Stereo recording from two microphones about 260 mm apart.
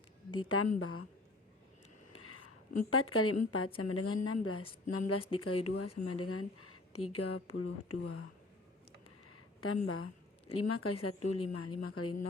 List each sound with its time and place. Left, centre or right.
0.3 s speech: left
2.1 s a sound: left
2.9 s a woman's voice: left
9.8 s speech: left
11.0 s speech: left
11.6 s speech: left